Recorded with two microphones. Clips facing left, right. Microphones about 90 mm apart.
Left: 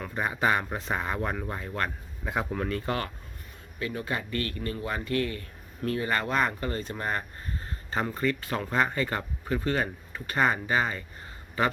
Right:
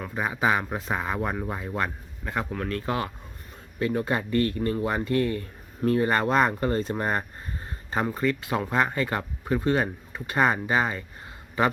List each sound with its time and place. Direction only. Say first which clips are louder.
0.0 s speech: right 2 dB; 5° right (ahead or behind)
2.2 s speech: even; 5° left (ahead or behind)
3.8 s speech: right 6 dB; 35° right (ahead or behind)
7.9 s speech: right 3 dB; 10° right (ahead or behind)